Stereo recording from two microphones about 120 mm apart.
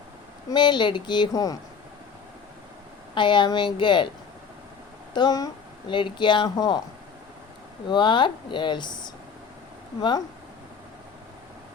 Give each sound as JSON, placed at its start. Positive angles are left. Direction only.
{"t": 0.5, "sound": "speech", "side_deg": 40}
{"t": 3.2, "sound": "speech", "side_deg": 40}
{"t": 5.1, "sound": "speech", "side_deg": 35}
{"t": 7.9, "sound": "speech", "side_deg": 40}